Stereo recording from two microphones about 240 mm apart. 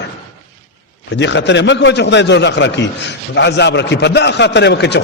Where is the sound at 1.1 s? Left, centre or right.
Left.